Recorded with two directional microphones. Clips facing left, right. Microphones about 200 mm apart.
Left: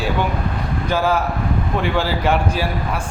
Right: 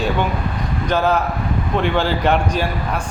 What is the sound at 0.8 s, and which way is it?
A man's voice, 10° left (ahead or behind).